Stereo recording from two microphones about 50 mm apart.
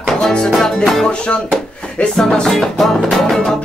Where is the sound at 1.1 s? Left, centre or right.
Left.